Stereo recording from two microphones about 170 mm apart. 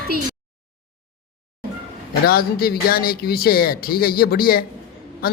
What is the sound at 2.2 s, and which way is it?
A man's voice, 65° left (ahead or behind).